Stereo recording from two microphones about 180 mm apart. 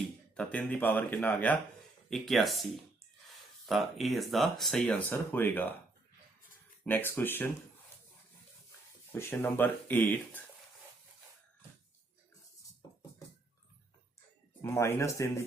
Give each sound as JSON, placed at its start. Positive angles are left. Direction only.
{"t": 0.3, "sound": "speech", "side_deg": 5}
{"t": 6.8, "sound": "speech", "side_deg": 10}
{"t": 9.1, "sound": "speech", "side_deg": 10}
{"t": 14.6, "sound": "speech", "side_deg": 15}